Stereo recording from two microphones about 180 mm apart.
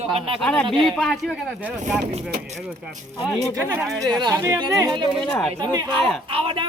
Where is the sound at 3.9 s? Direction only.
Centre (ahead or behind).